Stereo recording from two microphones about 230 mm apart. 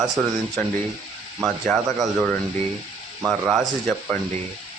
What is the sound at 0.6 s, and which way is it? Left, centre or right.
Speech, centre.